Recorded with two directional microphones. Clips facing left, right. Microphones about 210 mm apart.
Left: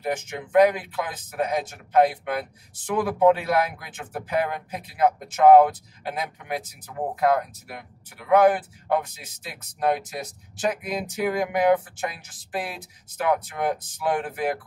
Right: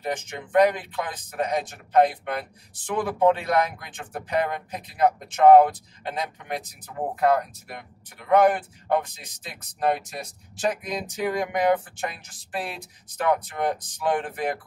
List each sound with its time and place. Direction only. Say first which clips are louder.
0.0 s speech: left 2 dB; 10° left (ahead or behind)